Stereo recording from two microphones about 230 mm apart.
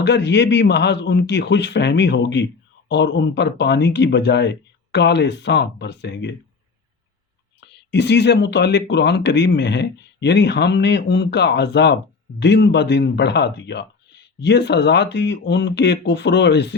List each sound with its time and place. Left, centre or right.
0.0 s speech: left
7.9 s speech: left